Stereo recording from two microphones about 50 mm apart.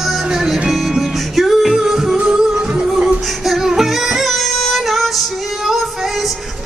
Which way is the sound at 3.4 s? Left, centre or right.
Centre.